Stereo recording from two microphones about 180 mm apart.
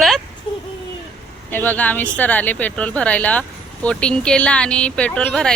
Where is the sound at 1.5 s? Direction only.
10° left (ahead or behind).